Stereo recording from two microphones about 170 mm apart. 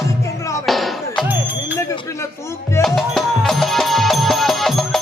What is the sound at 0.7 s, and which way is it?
Speech, centre (ahead or behind).